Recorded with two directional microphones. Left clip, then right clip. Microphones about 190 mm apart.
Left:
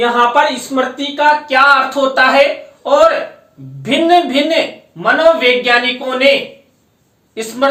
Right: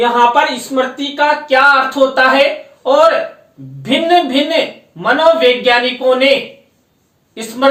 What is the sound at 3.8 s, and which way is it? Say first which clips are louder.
Speech: left 1 dB; 20° left (ahead or behind).